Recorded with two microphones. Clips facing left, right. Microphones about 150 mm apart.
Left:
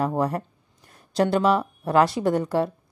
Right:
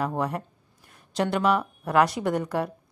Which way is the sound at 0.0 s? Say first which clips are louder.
Left 4 dB; 35° left (ahead or behind).